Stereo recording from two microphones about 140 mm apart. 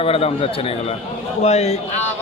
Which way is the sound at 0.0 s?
45° left (ahead or behind).